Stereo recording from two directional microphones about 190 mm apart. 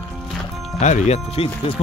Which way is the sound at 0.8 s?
40° left (ahead or behind).